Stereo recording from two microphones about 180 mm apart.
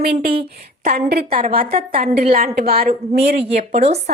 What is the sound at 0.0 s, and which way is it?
A woman's voice, 60° right (ahead or behind).